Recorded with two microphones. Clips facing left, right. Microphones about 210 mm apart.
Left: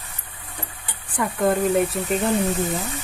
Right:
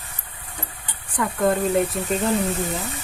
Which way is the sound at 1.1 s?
5° left (ahead or behind).